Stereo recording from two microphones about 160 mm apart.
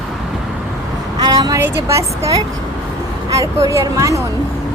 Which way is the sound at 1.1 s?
25° right (ahead or behind).